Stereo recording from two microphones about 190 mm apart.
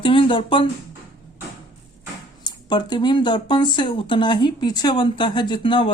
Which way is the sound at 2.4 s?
20° left (ahead or behind).